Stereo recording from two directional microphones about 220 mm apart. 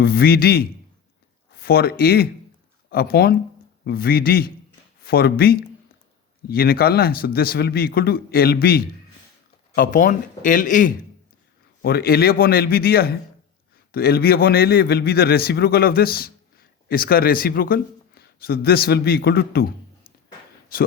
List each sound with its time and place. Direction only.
0.0 s a man's voice: 45° left (ahead or behind)